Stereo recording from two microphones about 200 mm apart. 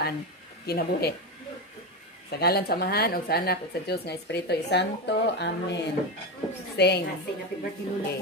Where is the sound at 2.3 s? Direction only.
55° left (ahead or behind).